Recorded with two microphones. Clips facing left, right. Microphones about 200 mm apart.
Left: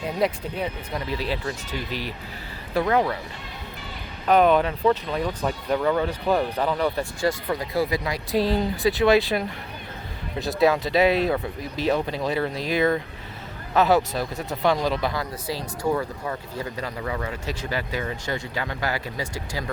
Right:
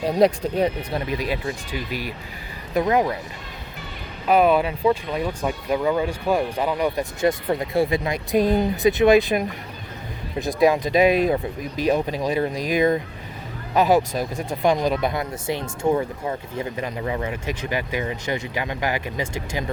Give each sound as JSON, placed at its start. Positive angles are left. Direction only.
{"t": 0.0, "sound": "speech", "side_deg": -35}
{"t": 1.0, "sound": "speech", "side_deg": -15}
{"t": 4.3, "sound": "speech", "side_deg": -10}
{"t": 10.6, "sound": "speech", "side_deg": -15}